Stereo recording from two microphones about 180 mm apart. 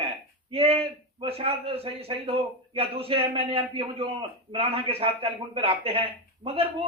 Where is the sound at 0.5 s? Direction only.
30° right (ahead or behind).